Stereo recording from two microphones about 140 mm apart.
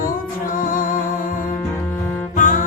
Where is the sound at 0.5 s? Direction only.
75° left (ahead or behind).